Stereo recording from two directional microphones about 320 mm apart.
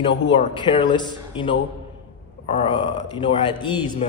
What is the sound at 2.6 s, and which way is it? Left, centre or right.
Speech, centre.